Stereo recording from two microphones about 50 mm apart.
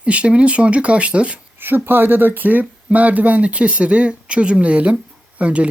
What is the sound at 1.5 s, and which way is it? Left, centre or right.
Speech, right.